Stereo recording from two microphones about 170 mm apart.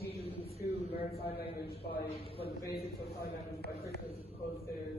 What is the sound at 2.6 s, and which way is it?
A man's voice, 70° left (ahead or behind).